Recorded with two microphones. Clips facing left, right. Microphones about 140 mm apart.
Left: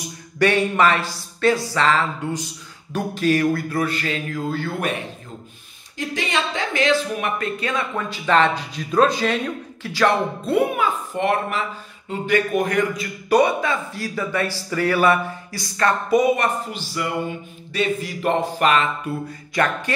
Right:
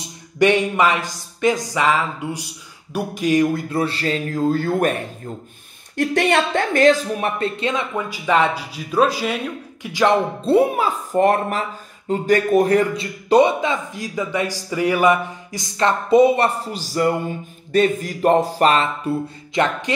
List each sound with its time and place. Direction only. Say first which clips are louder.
0.0 s speech: right 3 dB; 20° right (ahead or behind)
2.9 s a sound: right 1 dB; 10° right (ahead or behind); by 5.0 s 45° right (ahead or behind)
5.9 s a man's voice: right 7 dB; 60° right (ahead or behind); by 9.4 s 5° right (ahead or behind)
9.8 s speech: right 2 dB; 20° right (ahead or behind)
10.4 s a sound: right 4 dB; 30° right (ahead or behind)
12.1 s a man's voice: right 4 dB; 40° right (ahead or behind)
19.5 s a man's voice: right 2 dB; 20° right (ahead or behind)